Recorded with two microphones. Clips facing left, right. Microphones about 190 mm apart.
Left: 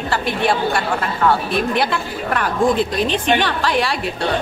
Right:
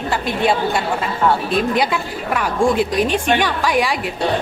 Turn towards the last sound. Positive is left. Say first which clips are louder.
# right 1 dB
turn(degrees=-15)  # may be behind; listen again after turning